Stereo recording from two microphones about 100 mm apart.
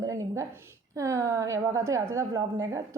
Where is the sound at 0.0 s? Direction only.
30° right (ahead or behind).